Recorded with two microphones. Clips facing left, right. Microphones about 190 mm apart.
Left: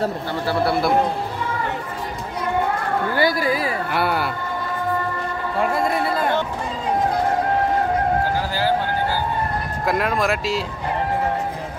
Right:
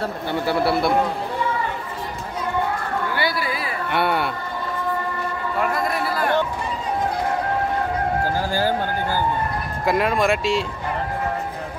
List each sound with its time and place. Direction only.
0.7 s speech: centre (ahead or behind)
3.2 s a sound: 45° left (ahead or behind)
3.9 s speech: centre (ahead or behind)
5.6 s speech: 25° left (ahead or behind)
8.5 s a sound: 45° right (ahead or behind)
9.8 s speech: centre (ahead or behind)